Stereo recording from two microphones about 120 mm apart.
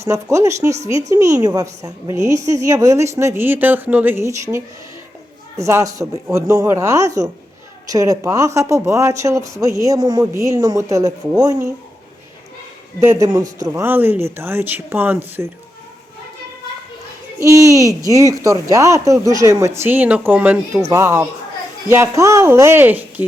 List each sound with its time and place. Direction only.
0.0 s a woman's voice: 25° right (ahead or behind)
13.0 s a woman's voice: 25° right (ahead or behind)
13.8 s speech: 15° right (ahead or behind)
17.4 s a woman's voice: 25° right (ahead or behind)